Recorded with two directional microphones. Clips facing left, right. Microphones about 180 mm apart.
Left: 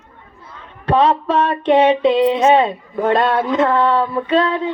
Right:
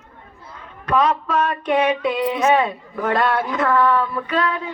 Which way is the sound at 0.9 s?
30° left (ahead or behind).